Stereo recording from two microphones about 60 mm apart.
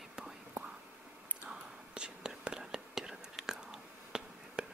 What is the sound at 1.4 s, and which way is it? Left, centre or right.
Whispering, centre.